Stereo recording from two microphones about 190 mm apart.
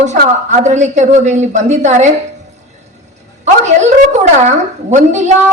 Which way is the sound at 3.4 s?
40° right (ahead or behind).